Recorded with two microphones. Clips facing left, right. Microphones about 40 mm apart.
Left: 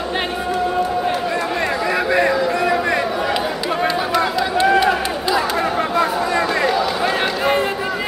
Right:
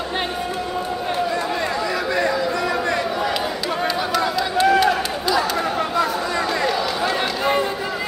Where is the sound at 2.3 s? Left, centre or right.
Left.